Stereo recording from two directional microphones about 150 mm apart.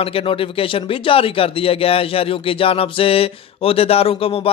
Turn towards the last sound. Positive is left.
turn(degrees=40)  # may be behind; listen again after turning